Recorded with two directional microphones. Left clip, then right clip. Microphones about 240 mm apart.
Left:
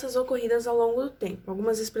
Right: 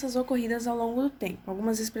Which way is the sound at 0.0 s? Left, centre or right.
Right.